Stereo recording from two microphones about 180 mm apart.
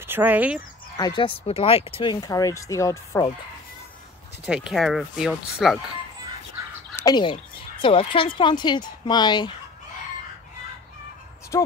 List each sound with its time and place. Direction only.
0.0 s speech: 10° right (ahead or behind)
0.9 s speech: 25° left (ahead or behind)
4.5 s speech: 5° right (ahead or behind)
7.0 s speech: 25° left (ahead or behind)
11.5 s speech: 20° left (ahead or behind)